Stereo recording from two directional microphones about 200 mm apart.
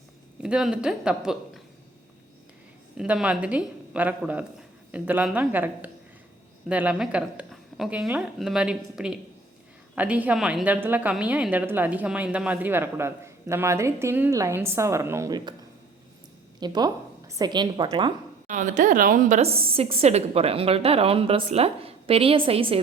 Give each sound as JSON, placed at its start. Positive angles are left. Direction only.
{"t": 0.4, "sound": "a woman's voice", "side_deg": -5}
{"t": 3.0, "sound": "a woman's voice", "side_deg": -5}
{"t": 16.6, "sound": "a woman's voice", "side_deg": -20}
{"t": 18.4, "sound": "a woman's voice", "side_deg": -40}